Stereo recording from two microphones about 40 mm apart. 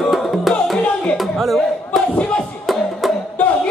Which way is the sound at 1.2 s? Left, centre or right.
Centre.